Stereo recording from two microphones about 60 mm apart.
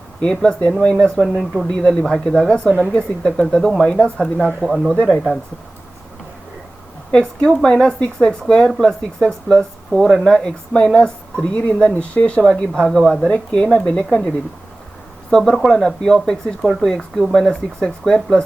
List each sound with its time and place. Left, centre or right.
0.2 s speech: centre
7.1 s speech: centre
13.0 s speech: centre
13.2 s speech: centre
15.3 s speech: centre